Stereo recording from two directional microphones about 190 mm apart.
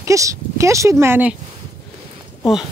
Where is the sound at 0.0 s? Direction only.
15° right (ahead or behind).